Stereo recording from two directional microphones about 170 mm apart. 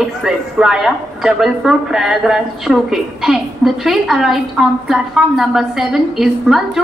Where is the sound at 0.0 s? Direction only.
Centre (ahead or behind).